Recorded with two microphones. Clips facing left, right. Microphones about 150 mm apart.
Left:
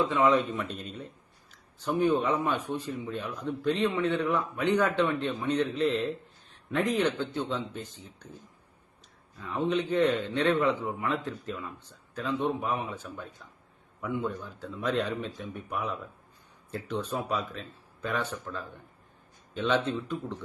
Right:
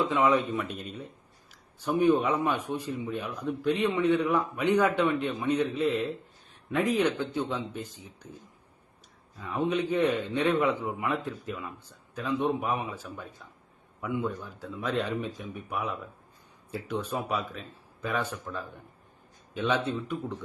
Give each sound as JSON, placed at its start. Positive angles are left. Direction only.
{"t": 0.3, "sound": "a man's voice", "side_deg": 0}
{"t": 9.4, "sound": "a man's voice", "side_deg": -10}